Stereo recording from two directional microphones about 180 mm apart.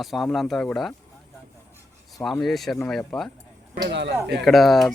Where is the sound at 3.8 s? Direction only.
75° right (ahead or behind).